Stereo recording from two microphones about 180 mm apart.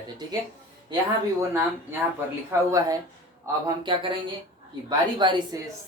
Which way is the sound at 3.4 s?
25° right (ahead or behind).